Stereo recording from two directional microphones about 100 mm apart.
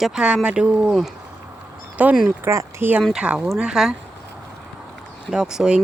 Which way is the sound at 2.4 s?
25° right (ahead or behind).